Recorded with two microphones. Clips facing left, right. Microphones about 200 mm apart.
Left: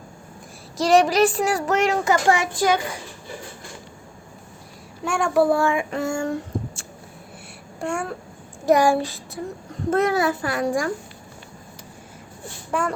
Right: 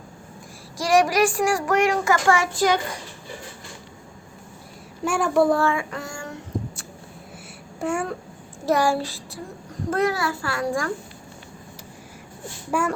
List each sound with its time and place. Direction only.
0.8 s a child's voice: 25° left (ahead or behind)
5.0 s child singing: 5° right (ahead or behind); by 6.2 s 25° left (ahead or behind)
7.8 s speech: 5° right (ahead or behind)
8.6 s child singing: 15° left (ahead or behind)
9.9 s a child's voice: 25° left (ahead or behind)
12.7 s speech: 10° right (ahead or behind)